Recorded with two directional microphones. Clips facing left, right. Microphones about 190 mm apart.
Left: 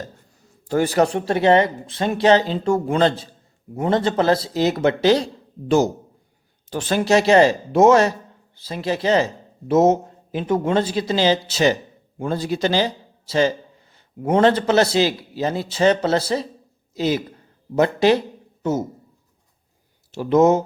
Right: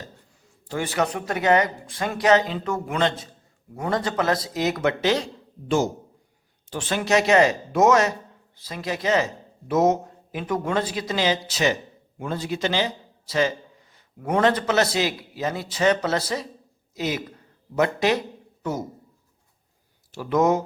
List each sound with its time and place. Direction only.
0.7 s a man's voice: 40° left (ahead or behind); by 18.9 s 25° left (ahead or behind)
20.1 s speech: 25° left (ahead or behind)